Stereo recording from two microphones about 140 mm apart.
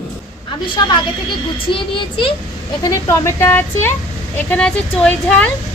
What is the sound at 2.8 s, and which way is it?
Speech, 20° left (ahead or behind).